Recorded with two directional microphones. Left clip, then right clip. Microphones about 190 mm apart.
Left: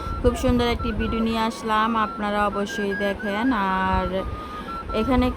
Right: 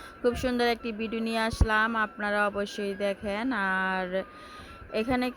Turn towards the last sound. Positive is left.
turn(degrees=-25)  # may be behind; listen again after turning